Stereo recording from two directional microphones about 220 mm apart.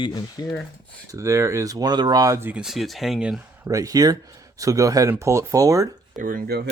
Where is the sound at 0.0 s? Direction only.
20° left (ahead or behind).